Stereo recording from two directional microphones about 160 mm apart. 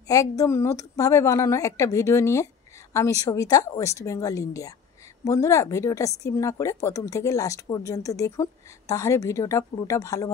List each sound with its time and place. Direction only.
0.1 s a woman's voice: 20° left (ahead or behind)